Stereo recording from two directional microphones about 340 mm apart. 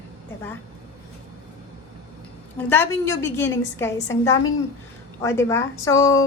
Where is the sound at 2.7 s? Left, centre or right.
Centre.